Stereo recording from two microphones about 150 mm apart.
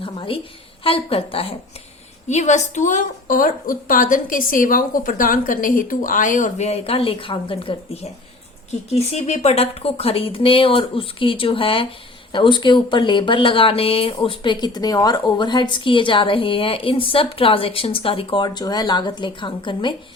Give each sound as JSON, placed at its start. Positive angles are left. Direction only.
{"t": 0.0, "sound": "a sound", "side_deg": 35}
{"t": 0.9, "sound": "speech", "side_deg": 40}
{"t": 2.3, "sound": "a woman's voice", "side_deg": 50}